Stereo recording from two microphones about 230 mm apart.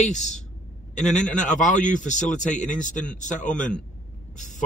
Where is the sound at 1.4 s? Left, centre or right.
Left.